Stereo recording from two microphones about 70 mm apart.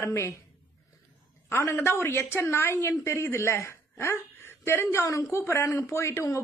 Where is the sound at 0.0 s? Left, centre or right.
Left.